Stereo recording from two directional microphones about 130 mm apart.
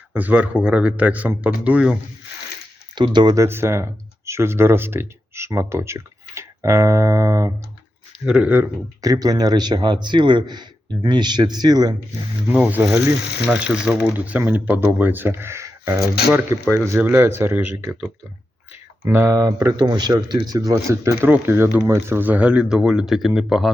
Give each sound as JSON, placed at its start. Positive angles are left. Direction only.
{"t": 0.1, "sound": "speech", "side_deg": -10}
{"t": 2.9, "sound": "a man's voice", "side_deg": -35}
{"t": 3.4, "sound": "speech", "side_deg": -20}
{"t": 8.2, "sound": "speech", "side_deg": -5}
{"t": 9.0, "sound": "a man's voice", "side_deg": -30}
{"t": 12.5, "sound": "speech", "side_deg": -10}
{"t": 16.6, "sound": "speech", "side_deg": 10}
{"t": 16.9, "sound": "speech", "side_deg": -15}
{"t": 19.0, "sound": "speech", "side_deg": -20}